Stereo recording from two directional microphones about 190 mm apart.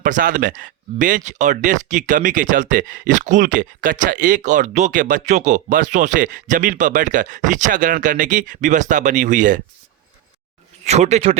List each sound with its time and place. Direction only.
0.0 s speech: 45° right (ahead or behind)
10.8 s speech: 35° right (ahead or behind)